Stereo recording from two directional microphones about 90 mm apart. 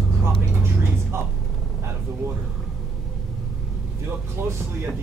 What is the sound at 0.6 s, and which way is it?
Vehicle, 30° right (ahead or behind).